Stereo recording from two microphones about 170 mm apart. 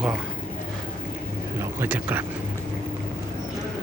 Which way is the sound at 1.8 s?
10° right (ahead or behind).